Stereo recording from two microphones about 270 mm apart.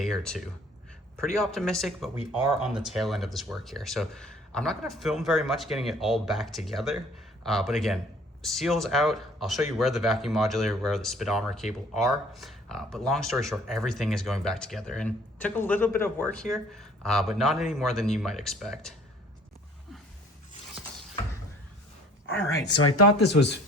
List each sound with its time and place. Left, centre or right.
0.0 s speech: centre
22.4 s speech: centre
22.8 s speech: left